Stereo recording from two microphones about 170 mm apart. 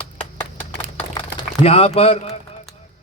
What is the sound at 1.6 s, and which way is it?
Speech, 35° left (ahead or behind).